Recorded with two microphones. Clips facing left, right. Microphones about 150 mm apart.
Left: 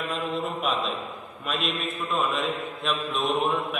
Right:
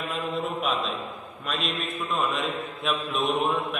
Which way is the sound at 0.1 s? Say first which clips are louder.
Right 1 dB; centre (ahead or behind).